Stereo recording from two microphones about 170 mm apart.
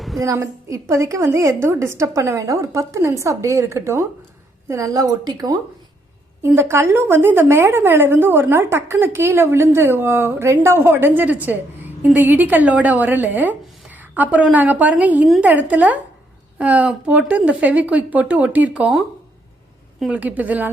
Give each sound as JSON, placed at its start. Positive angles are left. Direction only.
{"t": 0.2, "sound": "a woman's voice", "side_deg": -20}